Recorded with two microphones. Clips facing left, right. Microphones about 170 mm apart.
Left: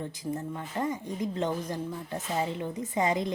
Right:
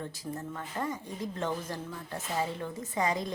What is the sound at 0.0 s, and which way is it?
A woman's voice, 20° left (ahead or behind).